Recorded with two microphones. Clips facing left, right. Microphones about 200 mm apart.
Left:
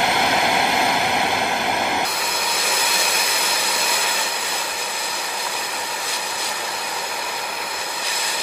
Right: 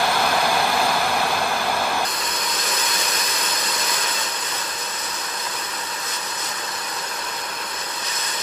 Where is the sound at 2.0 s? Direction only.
10° left (ahead or behind).